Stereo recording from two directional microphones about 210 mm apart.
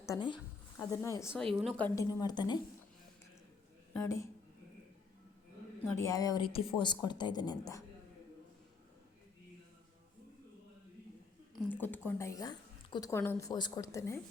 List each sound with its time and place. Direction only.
0.0 s a woman's voice: 20° left (ahead or behind)
1.5 s a woman's voice: 5° left (ahead or behind)
2.0 s a woman's voice: 20° left (ahead or behind)
6.0 s a woman's voice: 15° left (ahead or behind)
11.5 s a woman's voice: 10° left (ahead or behind)